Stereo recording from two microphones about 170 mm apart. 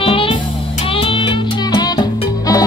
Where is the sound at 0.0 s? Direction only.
30° left (ahead or behind).